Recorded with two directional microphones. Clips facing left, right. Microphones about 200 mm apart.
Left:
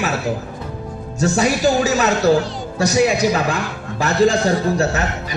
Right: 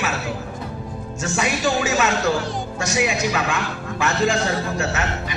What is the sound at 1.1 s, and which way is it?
A man's voice, 35° left (ahead or behind).